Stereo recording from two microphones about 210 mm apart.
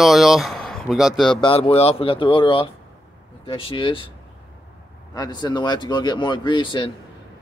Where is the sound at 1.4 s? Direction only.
25° left (ahead or behind).